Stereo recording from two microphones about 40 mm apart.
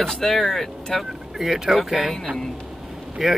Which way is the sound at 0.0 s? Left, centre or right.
Centre.